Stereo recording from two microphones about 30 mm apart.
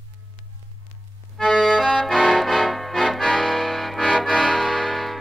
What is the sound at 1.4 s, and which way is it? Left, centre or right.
Accordion, centre.